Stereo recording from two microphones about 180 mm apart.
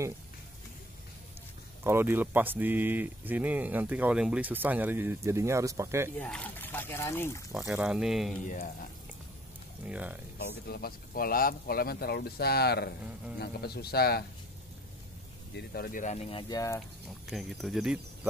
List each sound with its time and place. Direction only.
1.9 s speech: 10° right (ahead or behind)
6.1 s speech: 5° left (ahead or behind)
7.7 s speech: 5° right (ahead or behind)
8.4 s speech: 45° left (ahead or behind)
9.8 s speech: 10° right (ahead or behind)
10.7 s speech: 55° left (ahead or behind)
15.5 s speech: 55° left (ahead or behind); by 16.8 s 20° left (ahead or behind)
17.3 s speech: centre (ahead or behind)